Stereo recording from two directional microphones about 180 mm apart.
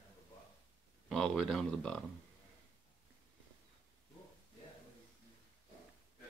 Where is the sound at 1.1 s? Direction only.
Centre (ahead or behind).